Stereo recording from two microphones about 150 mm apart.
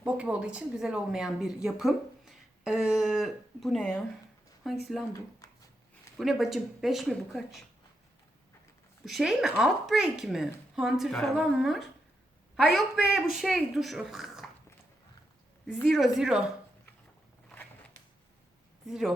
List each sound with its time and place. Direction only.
0.0 s a woman's voice: 5° right (ahead or behind)
5.4 s a sound: 20° left (ahead or behind)
6.1 s speech: centre (ahead or behind)
9.0 s speech: centre (ahead or behind)
15.6 s speech: centre (ahead or behind)
18.9 s speech: centre (ahead or behind)